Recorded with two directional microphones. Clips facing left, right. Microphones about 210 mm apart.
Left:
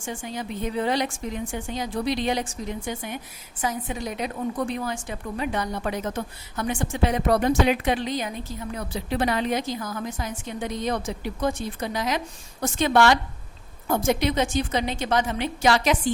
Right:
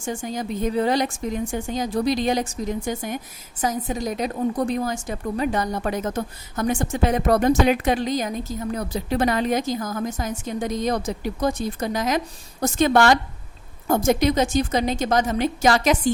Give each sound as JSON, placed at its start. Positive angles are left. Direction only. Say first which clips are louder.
{"t": 0.0, "sound": "a woman's voice", "louder": "right 4 dB", "side_deg": -40}